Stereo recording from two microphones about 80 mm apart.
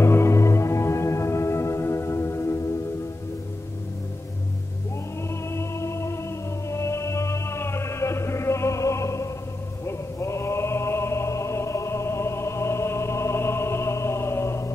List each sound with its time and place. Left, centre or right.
0.0 s music: left
5.5 s music: left
9.8 s chant: left